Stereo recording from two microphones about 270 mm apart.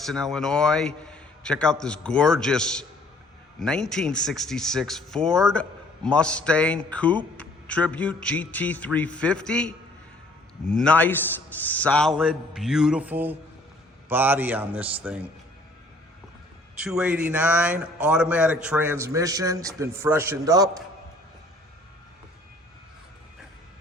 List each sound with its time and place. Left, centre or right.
0.0 s speech: centre
16.8 s speech: centre